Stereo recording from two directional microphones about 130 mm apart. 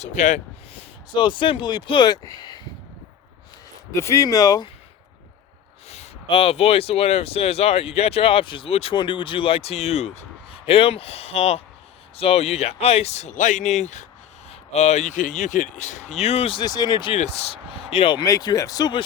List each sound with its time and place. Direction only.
0.0 s speech: 65° left (ahead or behind)
1.1 s speech: 35° left (ahead or behind)
3.9 s speech: 25° left (ahead or behind)
5.9 s speech: 50° left (ahead or behind)
16.6 s speech: 30° left (ahead or behind)
17.1 s speech: 55° left (ahead or behind); by 19.0 s 35° left (ahead or behind)